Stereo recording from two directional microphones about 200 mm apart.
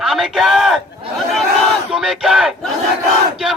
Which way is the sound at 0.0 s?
Centre (ahead or behind).